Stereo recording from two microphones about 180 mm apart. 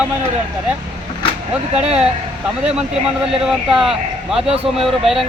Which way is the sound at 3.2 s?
5° right (ahead or behind).